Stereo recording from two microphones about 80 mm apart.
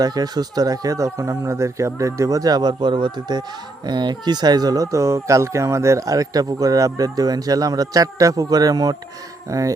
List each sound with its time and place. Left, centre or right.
0.0 s speech: right
9.5 s speech: right